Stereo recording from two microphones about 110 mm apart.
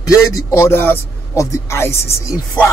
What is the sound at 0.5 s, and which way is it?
A woman's voice, 20° left (ahead or behind).